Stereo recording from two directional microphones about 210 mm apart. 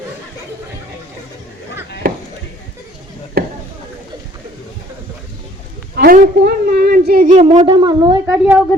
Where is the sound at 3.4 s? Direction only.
45° right (ahead or behind).